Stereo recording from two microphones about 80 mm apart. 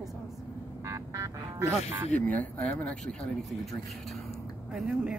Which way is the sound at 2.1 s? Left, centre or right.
Centre.